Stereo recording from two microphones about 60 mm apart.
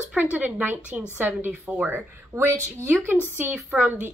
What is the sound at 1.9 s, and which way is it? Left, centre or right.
Speech, right.